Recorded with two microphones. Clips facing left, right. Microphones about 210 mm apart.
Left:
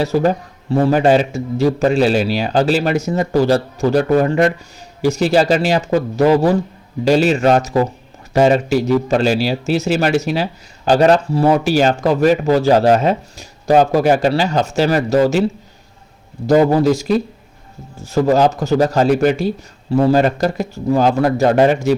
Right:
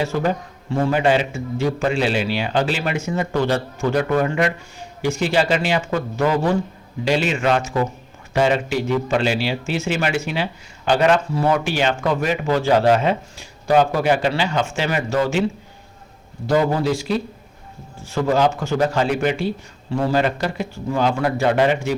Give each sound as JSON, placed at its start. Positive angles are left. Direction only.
{"t": 0.0, "sound": "a man's voice", "side_deg": 40}
{"t": 16.5, "sound": "a man's voice", "side_deg": 40}